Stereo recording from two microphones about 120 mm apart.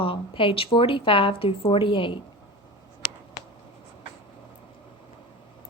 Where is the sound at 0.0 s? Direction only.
45° left (ahead or behind).